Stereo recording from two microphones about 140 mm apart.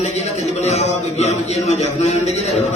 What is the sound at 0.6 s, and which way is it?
A man's voice, 50° left (ahead or behind).